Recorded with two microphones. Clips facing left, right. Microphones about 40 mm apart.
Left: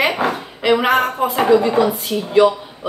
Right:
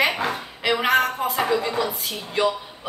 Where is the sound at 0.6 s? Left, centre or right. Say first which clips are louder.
Left 5 dB; centre.